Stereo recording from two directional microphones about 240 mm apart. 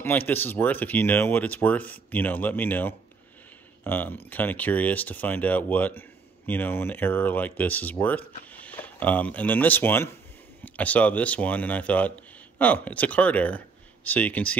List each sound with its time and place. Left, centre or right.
0.0 s speech: centre